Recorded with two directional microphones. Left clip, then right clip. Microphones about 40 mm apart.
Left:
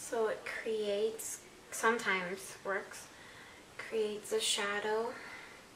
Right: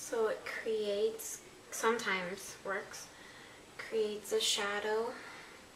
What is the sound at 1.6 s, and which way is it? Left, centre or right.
Speech, left.